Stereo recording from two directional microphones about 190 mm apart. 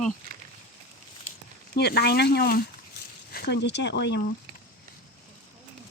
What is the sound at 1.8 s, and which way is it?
Speech, 60° left (ahead or behind).